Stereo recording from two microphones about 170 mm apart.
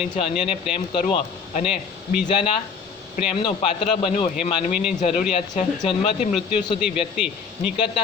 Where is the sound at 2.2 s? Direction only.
35° left (ahead or behind).